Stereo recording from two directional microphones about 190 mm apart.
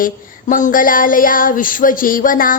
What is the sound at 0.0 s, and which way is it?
A woman's voice, 45° left (ahead or behind).